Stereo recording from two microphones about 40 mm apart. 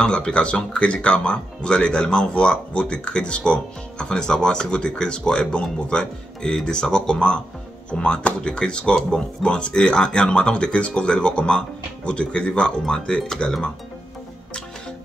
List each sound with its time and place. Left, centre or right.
0.0 s speech: left